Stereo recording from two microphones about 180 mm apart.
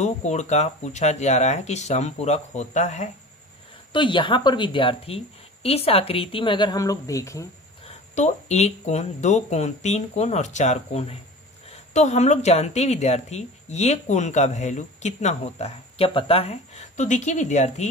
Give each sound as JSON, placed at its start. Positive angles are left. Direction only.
{"t": 0.0, "sound": "speech", "side_deg": 40}
{"t": 3.9, "sound": "a woman's voice", "side_deg": 25}
{"t": 8.1, "sound": "speech", "side_deg": 40}